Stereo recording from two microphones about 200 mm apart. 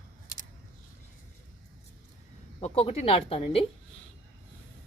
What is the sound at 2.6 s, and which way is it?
Speech, 30° left (ahead or behind).